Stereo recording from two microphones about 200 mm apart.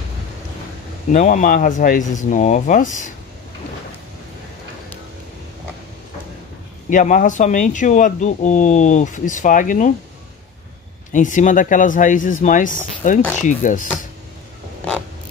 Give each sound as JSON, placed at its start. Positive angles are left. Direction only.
{"t": 1.1, "sound": "speech", "side_deg": 40}
{"t": 6.9, "sound": "speech", "side_deg": 40}
{"t": 11.1, "sound": "speech", "side_deg": 40}